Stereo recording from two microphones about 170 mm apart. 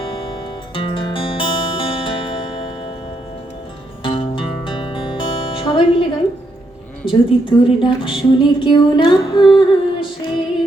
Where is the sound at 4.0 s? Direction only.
30° left (ahead or behind).